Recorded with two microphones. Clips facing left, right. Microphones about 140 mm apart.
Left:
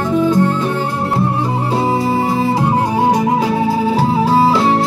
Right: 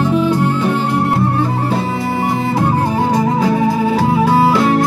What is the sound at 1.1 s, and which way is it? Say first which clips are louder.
Music: right 1 dB; 30° left (ahead or behind).